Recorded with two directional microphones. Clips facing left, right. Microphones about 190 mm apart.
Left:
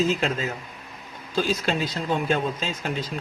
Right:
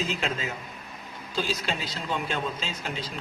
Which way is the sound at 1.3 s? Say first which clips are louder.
Left 6 dB; 50° left (ahead or behind).